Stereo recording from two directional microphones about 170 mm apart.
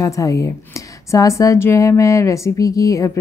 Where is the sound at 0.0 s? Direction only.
20° left (ahead or behind).